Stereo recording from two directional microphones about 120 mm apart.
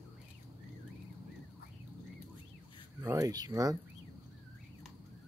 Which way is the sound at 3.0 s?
30° right (ahead or behind).